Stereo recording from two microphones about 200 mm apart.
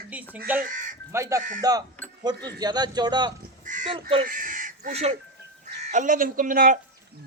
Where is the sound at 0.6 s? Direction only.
40° right (ahead or behind).